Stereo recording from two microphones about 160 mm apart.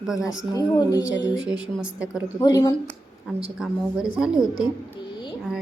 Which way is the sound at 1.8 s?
10° right (ahead or behind).